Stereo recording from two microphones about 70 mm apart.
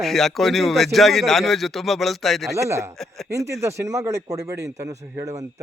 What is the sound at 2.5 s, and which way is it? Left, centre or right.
Speech, right.